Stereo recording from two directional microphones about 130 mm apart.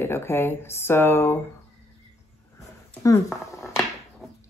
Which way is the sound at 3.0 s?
25° left (ahead or behind).